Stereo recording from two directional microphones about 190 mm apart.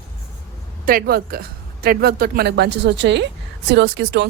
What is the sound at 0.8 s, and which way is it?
Speech, 50° right (ahead or behind).